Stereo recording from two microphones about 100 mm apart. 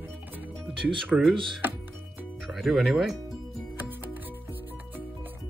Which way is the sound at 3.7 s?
20° right (ahead or behind).